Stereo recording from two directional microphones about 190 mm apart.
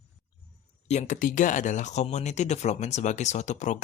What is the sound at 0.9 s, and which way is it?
Speech, 40° left (ahead or behind).